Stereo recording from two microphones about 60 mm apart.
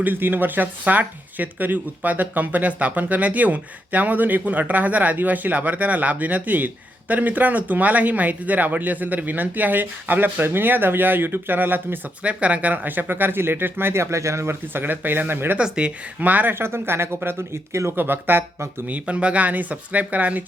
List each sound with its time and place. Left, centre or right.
0.0 s speech: right
12.2 s speech: right
14.7 s speech: right
15.6 s speech: centre; by 17.9 s right
17.9 s speech: right
18.9 s speech: right